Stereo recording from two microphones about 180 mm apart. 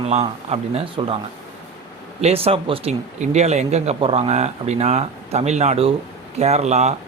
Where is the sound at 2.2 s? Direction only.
30° right (ahead or behind).